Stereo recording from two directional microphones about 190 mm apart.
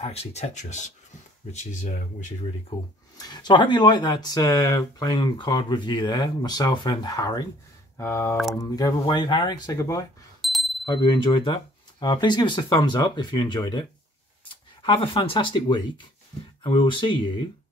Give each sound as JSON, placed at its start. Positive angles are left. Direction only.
{"t": 0.0, "sound": "speech", "side_deg": 35}
{"t": 2.7, "sound": "speech", "side_deg": 25}
{"t": 10.4, "sound": "a sound", "side_deg": 0}
{"t": 10.9, "sound": "speech", "side_deg": 25}